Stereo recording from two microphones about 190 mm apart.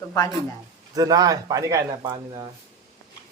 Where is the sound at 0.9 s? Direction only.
20° right (ahead or behind).